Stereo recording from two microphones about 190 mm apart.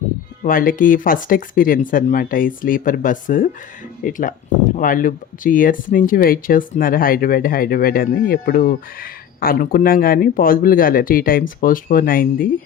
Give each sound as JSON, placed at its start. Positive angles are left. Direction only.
{"t": 0.4, "sound": "speech", "side_deg": 45}